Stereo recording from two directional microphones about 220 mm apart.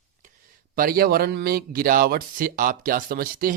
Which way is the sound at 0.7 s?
40° right (ahead or behind).